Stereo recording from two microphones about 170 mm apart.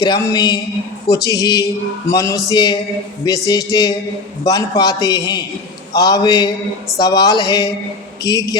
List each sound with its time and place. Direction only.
0.0 s speech: 20° left (ahead or behind)